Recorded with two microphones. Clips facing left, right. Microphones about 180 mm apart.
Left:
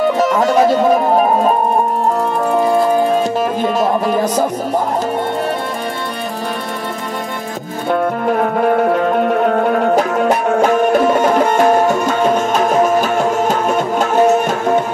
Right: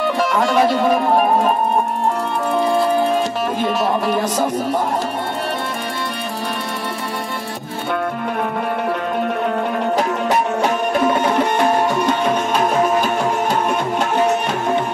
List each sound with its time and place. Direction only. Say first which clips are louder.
0.3 s music: left 1 dB; 45° left (ahead or behind)
2.8 s music: left 3 dB; 45° left (ahead or behind)
9.6 s music: left 6 dB; 50° left (ahead or behind)